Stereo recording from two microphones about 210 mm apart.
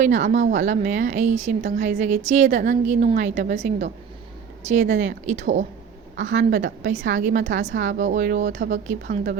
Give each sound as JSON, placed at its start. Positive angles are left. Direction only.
{"t": 0.0, "sound": "a woman's voice", "side_deg": -35}
{"t": 6.1, "sound": "a woman's voice", "side_deg": -60}
{"t": 7.2, "sound": "a woman's voice", "side_deg": -40}
{"t": 7.7, "sound": "a woman's voice", "side_deg": -60}